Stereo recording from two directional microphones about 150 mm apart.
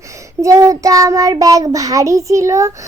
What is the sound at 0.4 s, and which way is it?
Child singing, 20° right (ahead or behind).